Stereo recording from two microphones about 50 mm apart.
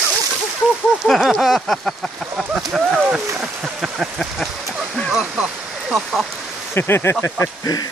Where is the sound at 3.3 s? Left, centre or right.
Centre.